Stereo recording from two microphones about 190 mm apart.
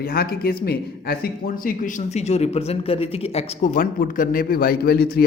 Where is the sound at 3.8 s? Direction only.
45° left (ahead or behind).